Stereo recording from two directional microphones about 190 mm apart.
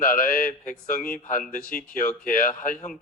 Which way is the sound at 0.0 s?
45° left (ahead or behind).